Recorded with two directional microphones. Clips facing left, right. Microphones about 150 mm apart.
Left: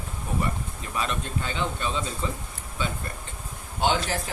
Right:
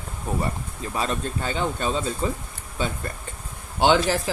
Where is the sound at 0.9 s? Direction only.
40° right (ahead or behind).